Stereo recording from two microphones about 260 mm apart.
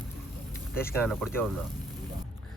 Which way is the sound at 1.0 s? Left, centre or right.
Centre.